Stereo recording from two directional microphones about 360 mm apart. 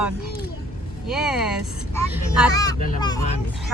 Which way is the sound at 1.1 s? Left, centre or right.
Centre.